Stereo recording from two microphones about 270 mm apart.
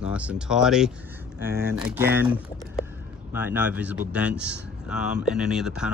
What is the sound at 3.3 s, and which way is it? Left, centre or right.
Speech, centre.